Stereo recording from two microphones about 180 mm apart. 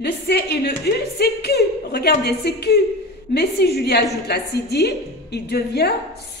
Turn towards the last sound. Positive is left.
turn(degrees=60)  # may be behind; listen again after turning